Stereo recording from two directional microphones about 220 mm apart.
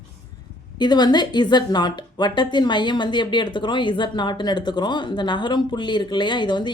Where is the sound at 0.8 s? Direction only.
20° left (ahead or behind).